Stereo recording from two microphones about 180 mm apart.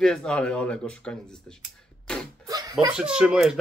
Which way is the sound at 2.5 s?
20° right (ahead or behind).